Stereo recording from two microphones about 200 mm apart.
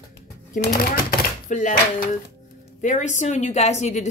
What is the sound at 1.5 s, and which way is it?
Speech, 35° left (ahead or behind).